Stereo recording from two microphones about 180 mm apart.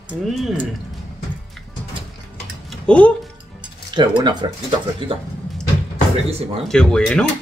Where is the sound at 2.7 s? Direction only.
5° left (ahead or behind).